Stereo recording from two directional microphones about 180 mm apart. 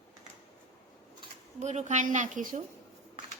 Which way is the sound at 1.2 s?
40° right (ahead or behind).